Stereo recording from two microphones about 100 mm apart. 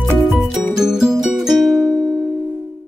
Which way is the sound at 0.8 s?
5° right (ahead or behind).